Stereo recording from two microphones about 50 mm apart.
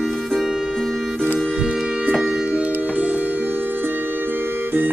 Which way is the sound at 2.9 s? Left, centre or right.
Right.